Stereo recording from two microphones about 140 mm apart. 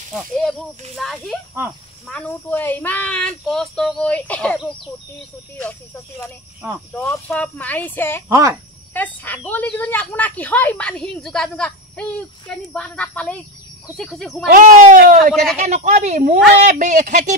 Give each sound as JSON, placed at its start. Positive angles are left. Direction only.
{"t": 0.1, "sound": "a woman's voice", "side_deg": 0}
{"t": 7.1, "sound": "a woman's voice", "side_deg": 15}
{"t": 8.3, "sound": "a child's voice", "side_deg": -20}
{"t": 8.9, "sound": "a woman's voice", "side_deg": 15}
{"t": 14.5, "sound": "speech", "side_deg": -65}
{"t": 15.6, "sound": "speech", "side_deg": -60}